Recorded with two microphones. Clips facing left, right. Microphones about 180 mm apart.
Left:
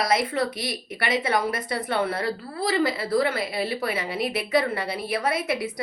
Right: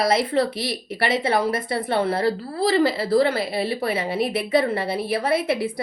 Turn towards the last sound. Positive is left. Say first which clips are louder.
# right 5 dB
turn(degrees=-30)  # may be behind; listen again after turning